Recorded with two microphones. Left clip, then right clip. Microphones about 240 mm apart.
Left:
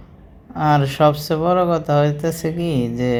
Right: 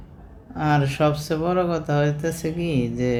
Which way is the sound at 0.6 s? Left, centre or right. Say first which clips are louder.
Left 5 dB; centre.